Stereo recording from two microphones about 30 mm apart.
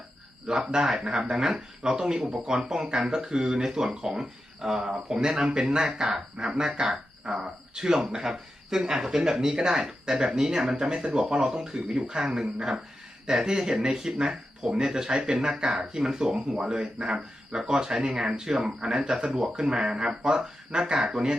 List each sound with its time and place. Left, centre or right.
0.4 s speech: right
5.8 s speech: right